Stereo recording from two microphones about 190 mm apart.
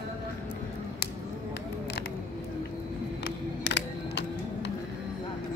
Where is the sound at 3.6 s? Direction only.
70° left (ahead or behind).